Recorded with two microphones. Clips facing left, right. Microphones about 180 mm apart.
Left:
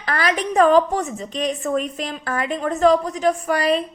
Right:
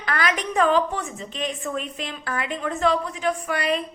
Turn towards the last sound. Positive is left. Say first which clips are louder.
# left 5 dB
turn(degrees=35)  # may be behind; listen again after turning